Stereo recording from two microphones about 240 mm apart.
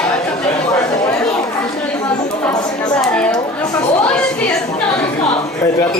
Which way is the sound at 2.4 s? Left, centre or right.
Centre.